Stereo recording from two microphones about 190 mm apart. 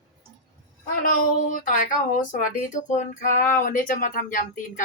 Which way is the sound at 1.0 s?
45° left (ahead or behind).